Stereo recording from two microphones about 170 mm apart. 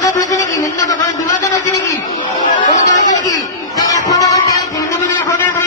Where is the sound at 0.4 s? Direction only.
45° left (ahead or behind).